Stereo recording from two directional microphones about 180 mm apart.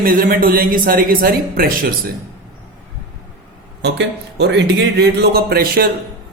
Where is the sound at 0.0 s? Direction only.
50° right (ahead or behind).